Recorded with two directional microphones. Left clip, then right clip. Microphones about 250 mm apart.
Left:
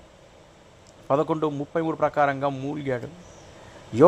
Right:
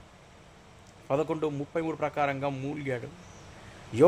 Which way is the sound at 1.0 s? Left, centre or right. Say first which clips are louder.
Left 6 dB; centre.